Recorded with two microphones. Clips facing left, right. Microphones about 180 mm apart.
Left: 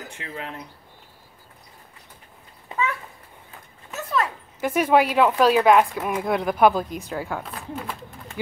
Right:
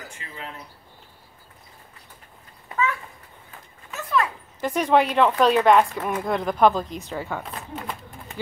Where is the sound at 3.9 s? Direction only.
30° left (ahead or behind).